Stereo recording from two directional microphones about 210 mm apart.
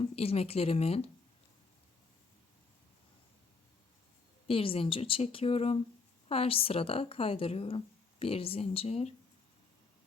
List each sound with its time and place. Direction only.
0.0 s speech: 30° left (ahead or behind)
4.4 s speech: 25° left (ahead or behind)